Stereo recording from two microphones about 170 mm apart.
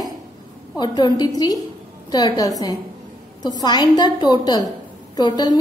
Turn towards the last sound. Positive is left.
turn(degrees=25)  # may be behind; listen again after turning